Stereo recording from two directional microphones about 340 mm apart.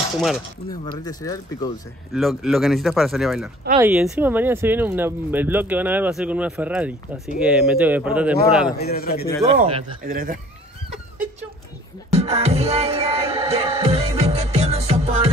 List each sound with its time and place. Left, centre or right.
0.9 s speech: centre
2.1 s speech: centre
8.7 s a man's voice: left
9.4 s speech: centre
12.1 s music: centre